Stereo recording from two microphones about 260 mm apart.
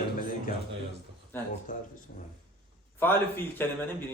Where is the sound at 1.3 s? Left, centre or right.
Centre.